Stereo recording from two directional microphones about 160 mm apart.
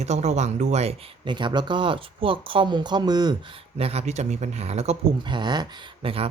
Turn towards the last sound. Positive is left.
turn(degrees=-35)  # may be behind; listen again after turning